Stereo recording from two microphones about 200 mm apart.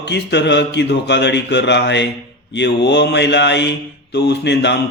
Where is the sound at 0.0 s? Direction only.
60° left (ahead or behind).